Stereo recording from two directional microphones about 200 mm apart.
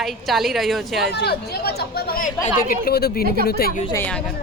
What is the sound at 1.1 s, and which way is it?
Speech, 55° left (ahead or behind).